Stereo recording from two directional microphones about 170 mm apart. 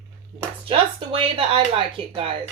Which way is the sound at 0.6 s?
35° right (ahead or behind).